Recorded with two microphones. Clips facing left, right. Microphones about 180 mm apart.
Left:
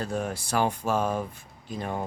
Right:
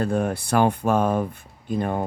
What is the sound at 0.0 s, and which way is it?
Speech, 55° right (ahead or behind).